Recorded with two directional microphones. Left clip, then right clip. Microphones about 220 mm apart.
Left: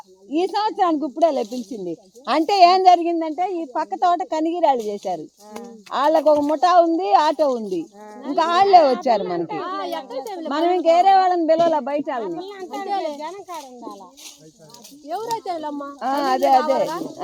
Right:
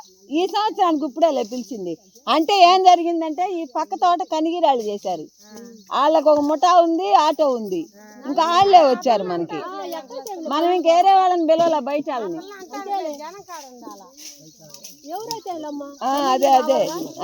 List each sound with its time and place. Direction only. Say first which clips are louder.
0.3 s speech: right 1 dB; 10° right (ahead or behind)
9.6 s a child's voice: left 3 dB; 40° left (ahead or behind)
10.5 s speech: even; 15° right (ahead or behind)
12.4 s a child's voice: left 3 dB; 40° left (ahead or behind)
15.1 s a child's voice: left 4 dB; 40° left (ahead or behind)
16.0 s speech: right 2 dB; 20° right (ahead or behind)